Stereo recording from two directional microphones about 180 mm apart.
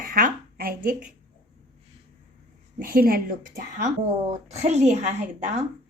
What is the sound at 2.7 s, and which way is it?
Speech, 55° right (ahead or behind).